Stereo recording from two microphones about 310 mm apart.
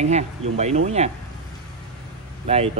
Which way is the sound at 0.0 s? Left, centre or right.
Right.